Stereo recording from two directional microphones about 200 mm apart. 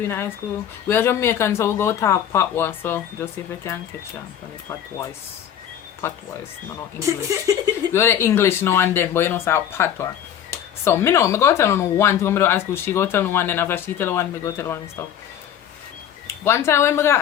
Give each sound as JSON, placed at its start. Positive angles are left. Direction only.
{"t": 0.9, "sound": "speech", "side_deg": 10}
{"t": 6.0, "sound": "speech", "side_deg": 10}
{"t": 7.0, "sound": "speech", "side_deg": -15}
{"t": 7.9, "sound": "speech", "side_deg": 10}
{"t": 16.2, "sound": "speech", "side_deg": 10}